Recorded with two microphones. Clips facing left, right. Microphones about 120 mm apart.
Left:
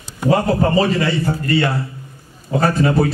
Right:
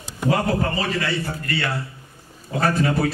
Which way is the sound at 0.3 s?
25° left (ahead or behind).